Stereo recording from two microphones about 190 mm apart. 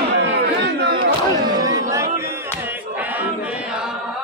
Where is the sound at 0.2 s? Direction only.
60° right (ahead or behind).